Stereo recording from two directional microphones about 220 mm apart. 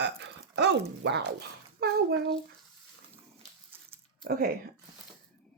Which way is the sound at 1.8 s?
45° right (ahead or behind).